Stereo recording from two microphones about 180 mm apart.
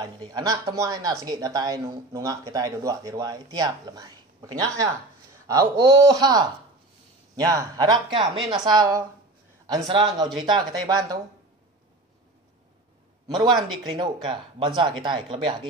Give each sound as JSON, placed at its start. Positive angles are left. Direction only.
{"t": 0.0, "sound": "speech", "side_deg": -25}
{"t": 13.3, "sound": "speech", "side_deg": -25}